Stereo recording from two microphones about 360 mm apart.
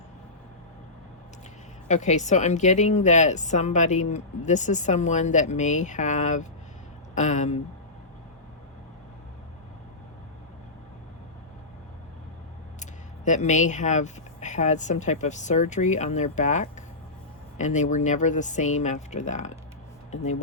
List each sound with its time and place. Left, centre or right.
1.9 s a woman's voice: centre
12.8 s a woman's voice: centre